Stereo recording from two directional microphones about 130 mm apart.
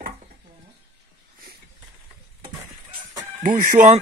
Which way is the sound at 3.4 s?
90° right.